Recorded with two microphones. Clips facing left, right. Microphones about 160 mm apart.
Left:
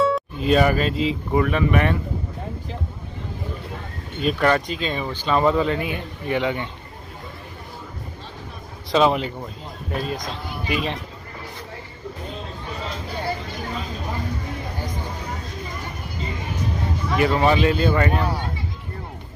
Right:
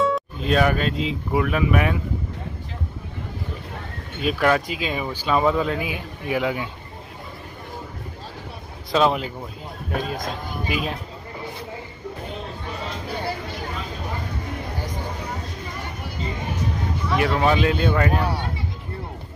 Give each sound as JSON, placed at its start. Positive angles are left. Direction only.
{"t": 0.0, "sound": "speech", "side_deg": 0}
{"t": 4.2, "sound": "speech", "side_deg": -5}
{"t": 8.9, "sound": "speech", "side_deg": 0}
{"t": 17.2, "sound": "speech", "side_deg": 0}